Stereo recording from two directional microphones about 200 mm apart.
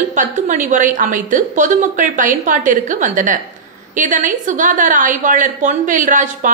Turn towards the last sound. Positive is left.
turn(degrees=-40)  # may be behind; listen again after turning